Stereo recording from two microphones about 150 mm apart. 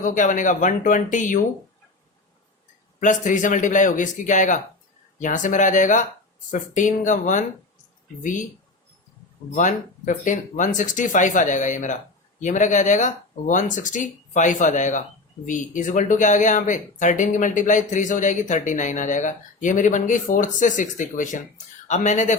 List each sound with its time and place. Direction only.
0.0 s speech: 60° left (ahead or behind)
3.0 s speech: 60° left (ahead or behind)
9.6 s speech: 60° left (ahead or behind)